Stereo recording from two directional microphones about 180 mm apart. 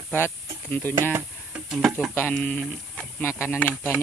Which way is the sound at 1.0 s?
15° right (ahead or behind).